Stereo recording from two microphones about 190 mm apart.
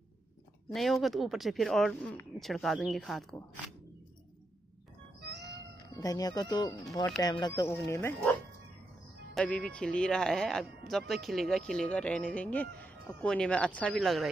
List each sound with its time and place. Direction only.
0.7 s speech: centre (ahead or behind)
5.2 s music: 60° right (ahead or behind)
5.5 s speech: 20° left (ahead or behind)
9.3 s speech: 5° left (ahead or behind)